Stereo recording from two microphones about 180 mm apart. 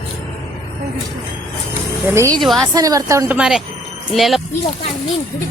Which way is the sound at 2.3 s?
5° left (ahead or behind).